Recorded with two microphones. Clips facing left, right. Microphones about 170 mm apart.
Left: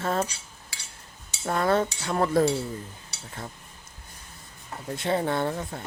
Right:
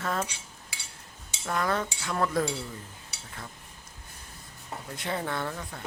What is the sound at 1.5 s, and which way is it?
Speech, 30° left (ahead or behind).